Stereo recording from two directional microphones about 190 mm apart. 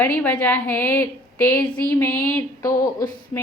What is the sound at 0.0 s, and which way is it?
A woman's voice, 10° left (ahead or behind).